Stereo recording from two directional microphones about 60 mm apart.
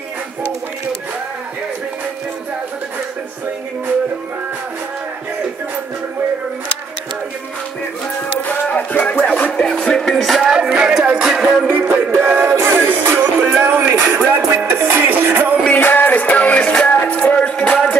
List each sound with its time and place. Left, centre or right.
8.4 s a sound: left
8.7 s music: left
9.5 s music: centre
10.5 s music: centre
11.6 s music: centre
12.1 s music: right
14.0 s music: centre
14.7 s music: right
15.7 s music: left; by 17.8 s centre